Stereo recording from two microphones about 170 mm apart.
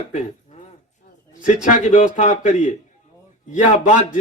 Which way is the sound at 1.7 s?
50° left (ahead or behind).